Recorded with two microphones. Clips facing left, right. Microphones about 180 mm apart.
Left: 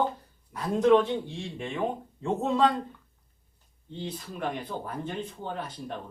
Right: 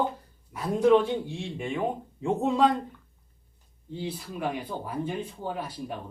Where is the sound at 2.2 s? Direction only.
10° right (ahead or behind).